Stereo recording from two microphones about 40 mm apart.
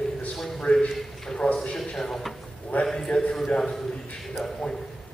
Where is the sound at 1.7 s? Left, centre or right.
Centre.